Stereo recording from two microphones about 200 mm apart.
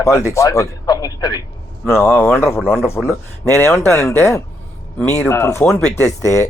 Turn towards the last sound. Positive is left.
turn(degrees=15)  # may be behind; listen again after turning